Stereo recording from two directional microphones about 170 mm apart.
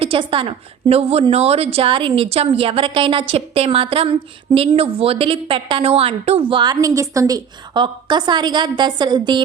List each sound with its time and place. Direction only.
0.0 s a woman's voice: 30° right (ahead or behind)